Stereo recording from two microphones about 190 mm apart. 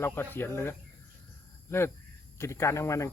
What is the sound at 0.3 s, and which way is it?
Speech, 10° left (ahead or behind).